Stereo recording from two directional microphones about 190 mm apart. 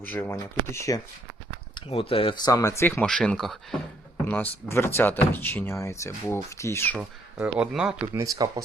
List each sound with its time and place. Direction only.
0.1 s speech: 10° left (ahead or behind)
1.7 s speech: 30° left (ahead or behind); by 7.0 s 10° left (ahead or behind)
7.6 s speech: 5° right (ahead or behind)
8.1 s speech: 15° right (ahead or behind)